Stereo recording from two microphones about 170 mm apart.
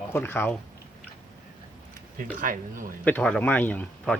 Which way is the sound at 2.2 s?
50° right (ahead or behind).